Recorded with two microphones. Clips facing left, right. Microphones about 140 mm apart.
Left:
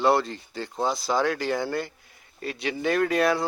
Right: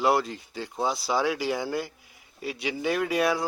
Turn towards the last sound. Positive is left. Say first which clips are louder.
# left 2 dB
turn(degrees=-5)  # may be behind; listen again after turning